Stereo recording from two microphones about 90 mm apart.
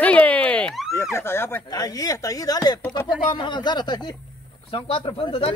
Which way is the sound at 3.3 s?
60° left (ahead or behind).